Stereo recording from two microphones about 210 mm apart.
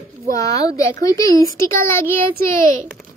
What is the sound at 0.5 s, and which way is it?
A child's voice, 15° left (ahead or behind).